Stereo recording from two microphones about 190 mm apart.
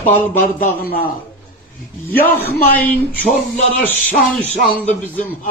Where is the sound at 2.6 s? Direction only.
10° left (ahead or behind).